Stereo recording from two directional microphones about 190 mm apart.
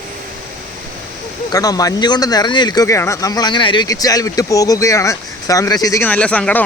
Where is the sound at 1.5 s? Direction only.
20° left (ahead or behind).